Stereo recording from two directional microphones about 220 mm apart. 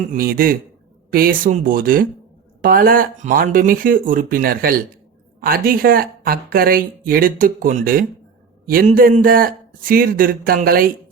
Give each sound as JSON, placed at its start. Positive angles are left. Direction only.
{"t": 0.1, "sound": "speech", "side_deg": -40}